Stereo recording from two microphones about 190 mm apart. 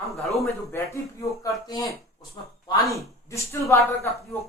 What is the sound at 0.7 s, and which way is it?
A man's voice, 15° left (ahead or behind).